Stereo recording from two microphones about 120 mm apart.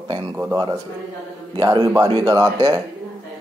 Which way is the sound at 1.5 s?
30° right (ahead or behind).